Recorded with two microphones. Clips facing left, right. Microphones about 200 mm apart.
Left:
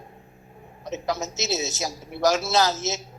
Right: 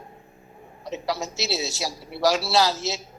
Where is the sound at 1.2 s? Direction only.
20° left (ahead or behind).